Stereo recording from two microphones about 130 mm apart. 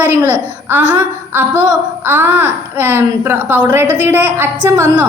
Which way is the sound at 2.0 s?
15° right (ahead or behind).